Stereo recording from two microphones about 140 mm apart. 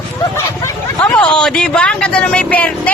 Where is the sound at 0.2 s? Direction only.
20° left (ahead or behind).